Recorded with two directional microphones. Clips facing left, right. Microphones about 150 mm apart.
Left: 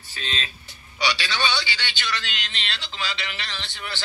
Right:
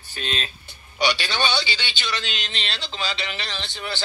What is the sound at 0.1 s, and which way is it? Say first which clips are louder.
Speech: right 3 dB; 55° right (ahead or behind).